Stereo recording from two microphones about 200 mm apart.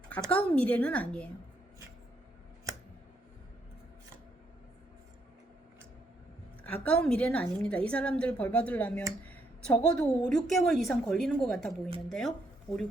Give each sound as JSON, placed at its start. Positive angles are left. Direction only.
{"t": 0.3, "sound": "a woman's voice", "side_deg": 5}
{"t": 6.7, "sound": "a woman's voice", "side_deg": 5}